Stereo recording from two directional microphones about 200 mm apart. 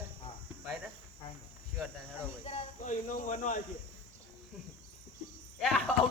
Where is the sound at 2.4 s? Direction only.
25° left (ahead or behind).